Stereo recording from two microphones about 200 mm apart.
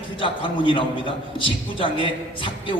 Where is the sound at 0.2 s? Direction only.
25° left (ahead or behind).